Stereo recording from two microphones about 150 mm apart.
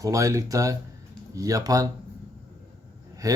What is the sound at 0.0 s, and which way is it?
Speech, 20° right (ahead or behind).